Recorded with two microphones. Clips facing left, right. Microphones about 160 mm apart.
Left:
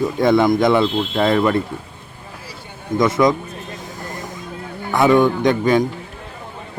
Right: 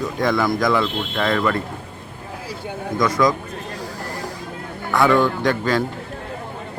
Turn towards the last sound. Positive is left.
turn(degrees=15)  # may be behind; listen again after turning